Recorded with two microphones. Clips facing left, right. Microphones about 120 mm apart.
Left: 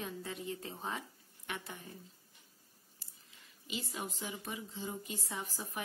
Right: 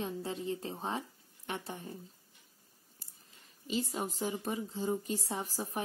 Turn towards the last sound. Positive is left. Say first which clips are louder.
# right 5 dB
turn(degrees=-35)  # may be behind; listen again after turning